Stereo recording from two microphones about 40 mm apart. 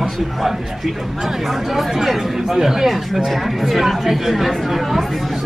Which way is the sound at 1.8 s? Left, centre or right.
Centre.